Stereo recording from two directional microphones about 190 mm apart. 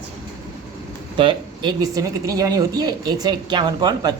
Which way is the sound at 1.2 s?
25° right (ahead or behind).